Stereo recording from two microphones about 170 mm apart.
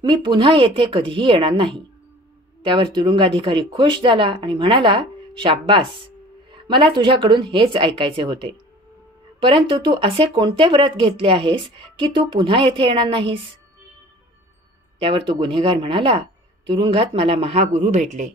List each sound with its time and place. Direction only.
0.0 s speech: 30° right (ahead or behind)
15.0 s speech: 30° right (ahead or behind); by 18.3 s 45° right (ahead or behind)